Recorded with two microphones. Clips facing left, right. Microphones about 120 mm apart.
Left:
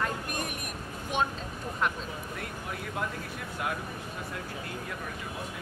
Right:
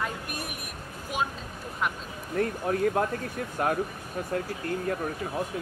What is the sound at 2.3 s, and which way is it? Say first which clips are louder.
Speech: right 11 dB; 45° right (ahead or behind).